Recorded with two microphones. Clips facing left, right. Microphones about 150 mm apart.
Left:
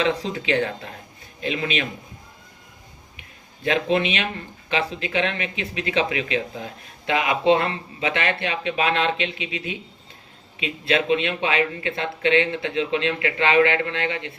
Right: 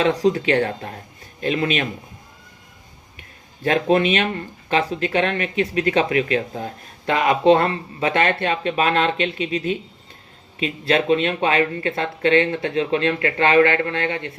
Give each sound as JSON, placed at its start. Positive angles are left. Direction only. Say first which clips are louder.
{"t": 0.0, "sound": "speech", "louder": "right 6 dB", "side_deg": -40}
{"t": 3.6, "sound": "speech", "louder": "right 4 dB", "side_deg": -45}